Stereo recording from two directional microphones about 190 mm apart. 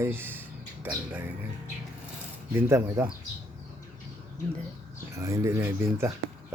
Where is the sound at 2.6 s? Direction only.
15° right (ahead or behind).